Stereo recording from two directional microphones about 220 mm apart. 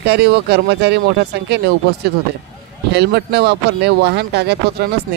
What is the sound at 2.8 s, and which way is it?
Speech, 50° right (ahead or behind).